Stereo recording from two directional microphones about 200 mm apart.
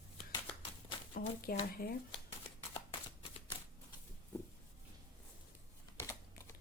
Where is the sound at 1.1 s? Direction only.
45° left (ahead or behind).